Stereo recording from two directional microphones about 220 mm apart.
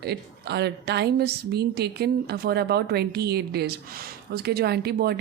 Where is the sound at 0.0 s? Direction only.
50° right (ahead or behind).